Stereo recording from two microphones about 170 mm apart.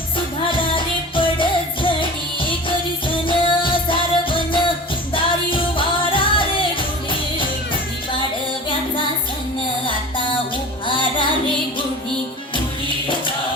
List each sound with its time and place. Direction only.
0.4 s music: 30° left (ahead or behind)
10.8 s music: 30° left (ahead or behind)